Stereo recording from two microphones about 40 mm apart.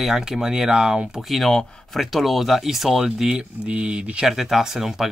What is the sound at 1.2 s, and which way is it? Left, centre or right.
Speech, centre.